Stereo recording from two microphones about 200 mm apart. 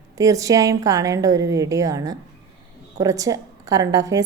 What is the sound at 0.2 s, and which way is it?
A woman's voice, 15° right (ahead or behind).